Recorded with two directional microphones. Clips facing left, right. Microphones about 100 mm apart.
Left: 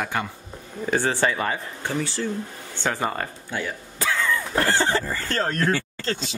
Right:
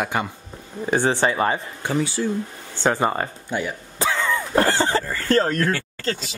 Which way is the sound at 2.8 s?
30° right (ahead or behind).